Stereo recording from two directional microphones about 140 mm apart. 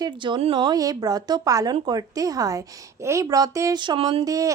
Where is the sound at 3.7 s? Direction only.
35° right (ahead or behind).